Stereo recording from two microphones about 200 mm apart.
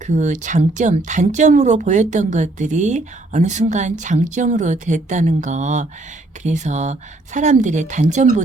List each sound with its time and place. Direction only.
0.0 s speech: 40° right (ahead or behind)